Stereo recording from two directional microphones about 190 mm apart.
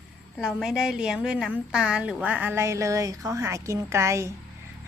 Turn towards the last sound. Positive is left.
turn(degrees=-15)  # may be behind; listen again after turning